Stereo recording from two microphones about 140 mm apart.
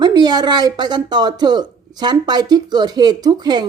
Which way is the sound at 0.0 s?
30° right (ahead or behind).